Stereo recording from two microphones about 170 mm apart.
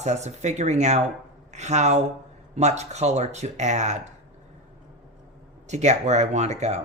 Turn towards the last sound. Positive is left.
turn(degrees=-40)  # may be behind; listen again after turning